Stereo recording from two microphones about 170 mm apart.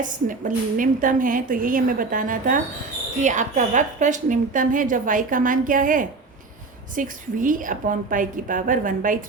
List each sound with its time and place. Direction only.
0.0 s a woman's voice: 50° right (ahead or behind)